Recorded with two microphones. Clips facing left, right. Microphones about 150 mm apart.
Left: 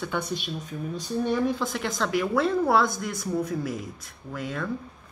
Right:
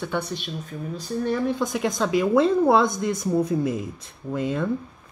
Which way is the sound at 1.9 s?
20° right (ahead or behind).